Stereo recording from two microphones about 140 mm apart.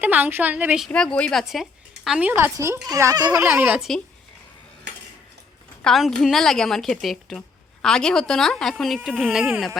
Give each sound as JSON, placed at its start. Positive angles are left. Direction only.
{"t": 0.0, "sound": "a woman's voice", "side_deg": -10}
{"t": 0.9, "sound": "a woman's voice", "side_deg": 5}
{"t": 2.3, "sound": "speech", "side_deg": -20}
{"t": 3.3, "sound": "a woman's voice", "side_deg": -10}
{"t": 5.8, "sound": "a woman's voice", "side_deg": 0}